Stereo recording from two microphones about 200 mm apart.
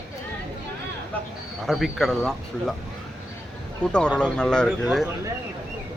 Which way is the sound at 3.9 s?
5° left (ahead or behind).